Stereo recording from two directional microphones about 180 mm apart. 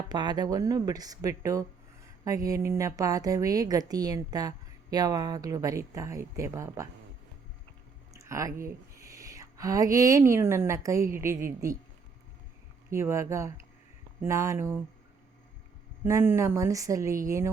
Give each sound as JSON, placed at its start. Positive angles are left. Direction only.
{"t": 0.1, "sound": "a woman's voice", "side_deg": -20}
{"t": 8.1, "sound": "a sound", "side_deg": -15}
{"t": 9.0, "sound": "a woman's voice", "side_deg": -15}
{"t": 12.9, "sound": "a woman's voice", "side_deg": -15}
{"t": 16.0, "sound": "a woman's voice", "side_deg": -15}